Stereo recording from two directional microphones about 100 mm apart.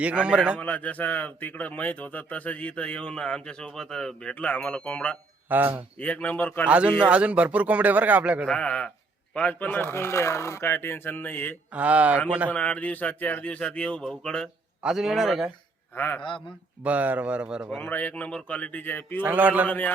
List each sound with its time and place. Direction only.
0.0 s speech: 10° right (ahead or behind)
0.6 s a man's voice: 15° left (ahead or behind)
5.5 s speech: 20° right (ahead or behind)
6.0 s a man's voice: 15° left (ahead or behind)
6.7 s speech: 10° right (ahead or behind)
8.4 s a man's voice: 10° left (ahead or behind)
11.7 s speech: 15° right (ahead or behind)
12.5 s a man's voice: 15° left (ahead or behind)
14.8 s a man's voice: 5° right (ahead or behind)
16.0 s a man's voice: 20° left (ahead or behind)
16.8 s speech: 15° right (ahead or behind)
17.7 s a man's voice: 20° left (ahead or behind)
19.2 s speech: 15° right (ahead or behind)
19.6 s a man's voice: 15° left (ahead or behind)